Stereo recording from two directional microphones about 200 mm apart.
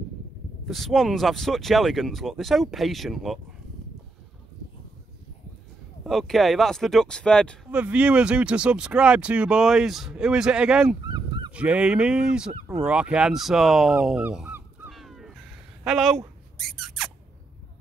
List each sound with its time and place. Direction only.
0.7 s speech: centre (ahead or behind)
6.0 s speech: centre (ahead or behind)
11.1 s goose: 20° right (ahead or behind)
11.5 s speech: 5° right (ahead or behind)
16.5 s squeak: centre (ahead or behind)